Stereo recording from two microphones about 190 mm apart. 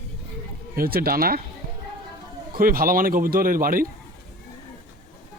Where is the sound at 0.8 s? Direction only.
50° right (ahead or behind).